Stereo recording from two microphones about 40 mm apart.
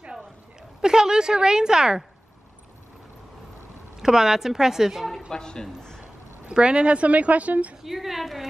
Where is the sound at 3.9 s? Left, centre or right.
Centre.